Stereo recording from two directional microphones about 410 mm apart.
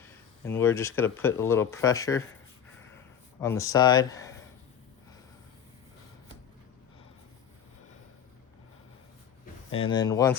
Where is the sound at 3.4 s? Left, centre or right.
Centre.